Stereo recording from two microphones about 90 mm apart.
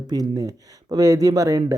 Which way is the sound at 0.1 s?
45° right (ahead or behind).